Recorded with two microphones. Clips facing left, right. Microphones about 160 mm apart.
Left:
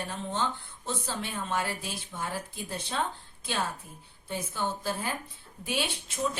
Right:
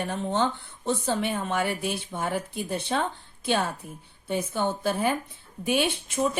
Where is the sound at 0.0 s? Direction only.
60° right (ahead or behind).